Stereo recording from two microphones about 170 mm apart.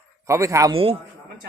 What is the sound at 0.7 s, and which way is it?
Speech, 35° right (ahead or behind).